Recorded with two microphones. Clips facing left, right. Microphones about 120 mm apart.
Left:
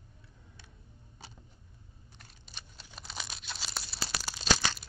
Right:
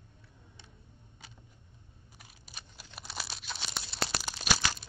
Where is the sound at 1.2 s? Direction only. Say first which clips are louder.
Left 4 dB; 35° left (ahead or behind).